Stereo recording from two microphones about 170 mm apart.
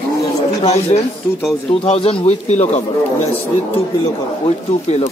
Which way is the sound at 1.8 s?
35° left (ahead or behind).